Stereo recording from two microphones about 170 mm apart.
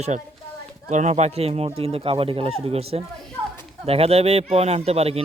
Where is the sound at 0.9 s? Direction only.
45° right (ahead or behind).